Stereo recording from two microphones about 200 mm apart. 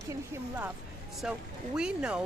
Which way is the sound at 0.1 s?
10° right (ahead or behind).